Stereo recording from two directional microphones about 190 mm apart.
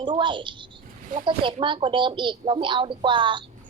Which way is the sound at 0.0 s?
25° right (ahead or behind).